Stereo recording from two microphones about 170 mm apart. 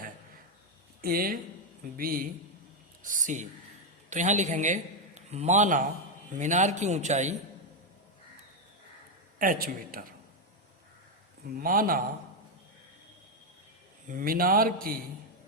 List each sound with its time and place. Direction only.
1.0 s a man's voice: 60° right (ahead or behind); by 7.3 s 45° right (ahead or behind)
9.4 s speech: 60° right (ahead or behind)
11.4 s speech: 55° right (ahead or behind)
14.1 s speech: 55° right (ahead or behind)